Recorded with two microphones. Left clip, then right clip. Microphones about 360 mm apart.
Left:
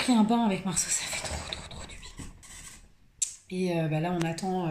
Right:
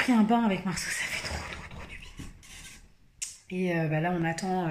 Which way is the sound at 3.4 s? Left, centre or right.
Centre.